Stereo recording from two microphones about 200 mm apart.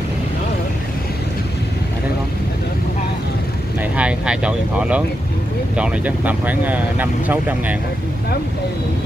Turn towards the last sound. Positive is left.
turn(degrees=-10)  # may be behind; listen again after turning